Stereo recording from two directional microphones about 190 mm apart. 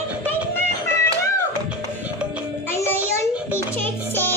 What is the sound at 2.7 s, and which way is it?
Music, 15° left (ahead or behind).